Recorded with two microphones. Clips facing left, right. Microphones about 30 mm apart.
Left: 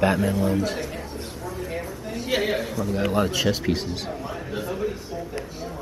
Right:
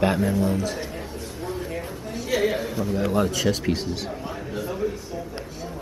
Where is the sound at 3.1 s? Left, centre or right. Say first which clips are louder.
Even; centre.